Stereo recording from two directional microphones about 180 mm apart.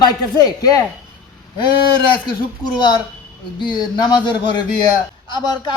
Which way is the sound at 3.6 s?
25° left (ahead or behind).